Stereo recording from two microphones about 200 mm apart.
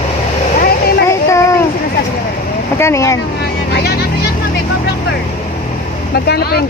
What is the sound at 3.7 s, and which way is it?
Music, 50° left (ahead or behind).